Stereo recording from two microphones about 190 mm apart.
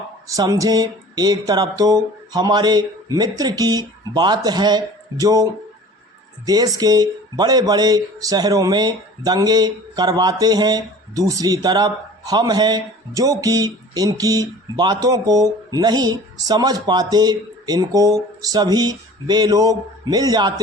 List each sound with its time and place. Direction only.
0.3 s speech: 20° right (ahead or behind)